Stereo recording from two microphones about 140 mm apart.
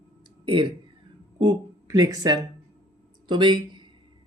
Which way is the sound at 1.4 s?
30° right (ahead or behind).